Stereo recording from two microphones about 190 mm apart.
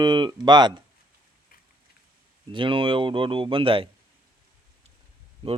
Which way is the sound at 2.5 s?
25° right (ahead or behind).